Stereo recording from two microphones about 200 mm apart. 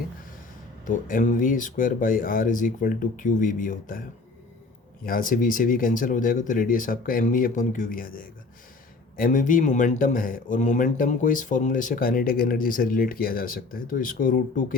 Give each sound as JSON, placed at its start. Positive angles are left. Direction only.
{"t": 0.9, "sound": "speech", "side_deg": 40}
{"t": 5.0, "sound": "a man's voice", "side_deg": 45}
{"t": 9.1, "sound": "a man's voice", "side_deg": 40}